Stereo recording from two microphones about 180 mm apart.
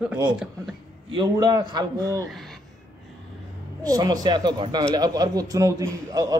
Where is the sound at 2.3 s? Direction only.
Centre (ahead or behind).